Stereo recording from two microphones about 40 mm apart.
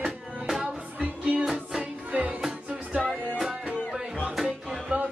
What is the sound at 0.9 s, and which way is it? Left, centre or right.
Music, right.